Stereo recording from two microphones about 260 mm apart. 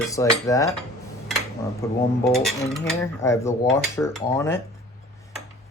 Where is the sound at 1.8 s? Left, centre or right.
Centre.